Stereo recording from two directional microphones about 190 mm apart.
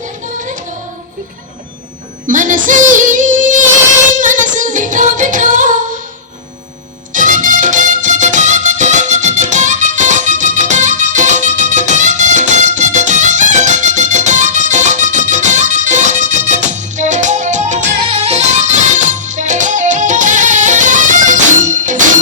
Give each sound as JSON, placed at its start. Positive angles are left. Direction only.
{"t": 2.2, "sound": "child singing", "side_deg": -45}
{"t": 4.2, "sound": "music", "side_deg": -40}
{"t": 7.1, "sound": "music", "side_deg": -40}